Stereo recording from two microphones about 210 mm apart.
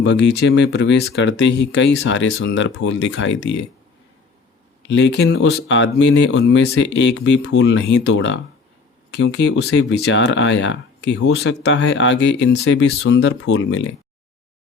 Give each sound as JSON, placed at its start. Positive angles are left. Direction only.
{"t": 0.0, "sound": "speech", "side_deg": 55}
{"t": 4.9, "sound": "speech", "side_deg": 60}
{"t": 11.2, "sound": "speech", "side_deg": 70}